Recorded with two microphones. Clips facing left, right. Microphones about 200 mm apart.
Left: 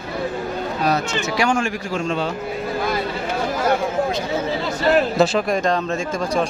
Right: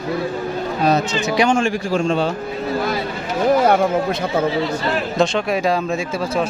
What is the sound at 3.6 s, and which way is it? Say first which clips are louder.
Speech: right 4 dB; 55° right (ahead or behind).